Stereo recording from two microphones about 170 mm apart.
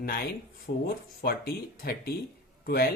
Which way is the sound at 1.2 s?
65° left (ahead or behind).